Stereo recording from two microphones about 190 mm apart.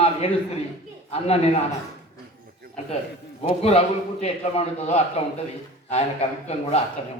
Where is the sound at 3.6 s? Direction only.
35° left (ahead or behind).